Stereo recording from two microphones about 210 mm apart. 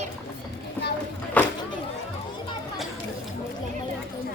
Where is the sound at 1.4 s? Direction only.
5° left (ahead or behind).